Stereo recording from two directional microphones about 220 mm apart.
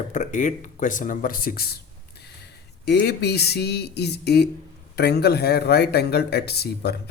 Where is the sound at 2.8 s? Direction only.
50° left (ahead or behind).